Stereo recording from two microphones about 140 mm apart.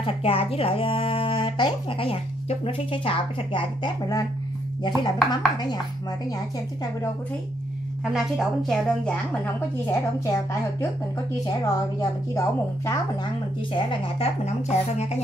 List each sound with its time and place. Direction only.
0.0 s speech: 40° left (ahead or behind)
8.0 s a woman's voice: 5° right (ahead or behind)
9.8 s a woman's voice: 25° left (ahead or behind)
13.7 s speech: 40° left (ahead or behind)